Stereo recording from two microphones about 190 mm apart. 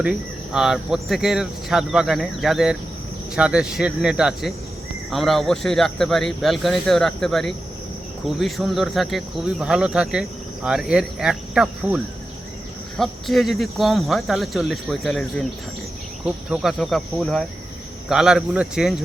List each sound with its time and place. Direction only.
0.0 s speech: 5° right (ahead or behind)